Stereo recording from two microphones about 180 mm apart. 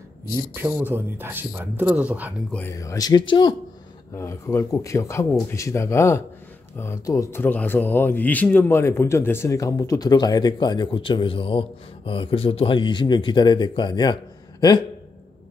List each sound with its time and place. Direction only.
0.6 s speech: 10° right (ahead or behind)
2.5 s speech: 15° left (ahead or behind)
4.1 s speech: 15° left (ahead or behind)